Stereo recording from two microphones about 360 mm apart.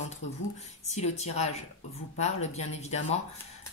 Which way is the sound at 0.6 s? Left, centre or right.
Centre.